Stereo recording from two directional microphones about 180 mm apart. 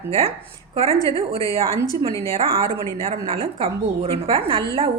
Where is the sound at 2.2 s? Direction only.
30° right (ahead or behind).